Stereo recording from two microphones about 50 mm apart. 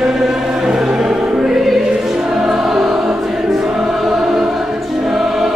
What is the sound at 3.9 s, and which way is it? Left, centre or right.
Choir, centre.